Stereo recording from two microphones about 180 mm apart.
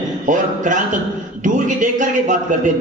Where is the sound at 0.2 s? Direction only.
45° right (ahead or behind).